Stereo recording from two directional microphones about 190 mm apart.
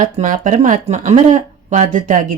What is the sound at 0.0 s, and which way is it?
Speech, 45° right (ahead or behind).